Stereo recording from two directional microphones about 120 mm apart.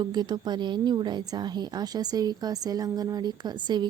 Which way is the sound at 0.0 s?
35° right (ahead or behind).